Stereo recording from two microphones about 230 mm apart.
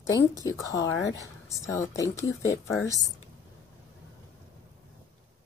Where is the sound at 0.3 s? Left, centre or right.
Centre.